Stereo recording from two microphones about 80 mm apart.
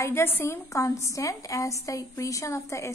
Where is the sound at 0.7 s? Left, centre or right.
Left.